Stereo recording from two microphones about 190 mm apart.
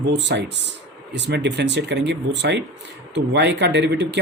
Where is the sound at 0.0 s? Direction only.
65° right (ahead or behind).